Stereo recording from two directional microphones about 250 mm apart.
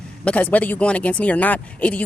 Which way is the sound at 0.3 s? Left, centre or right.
Centre.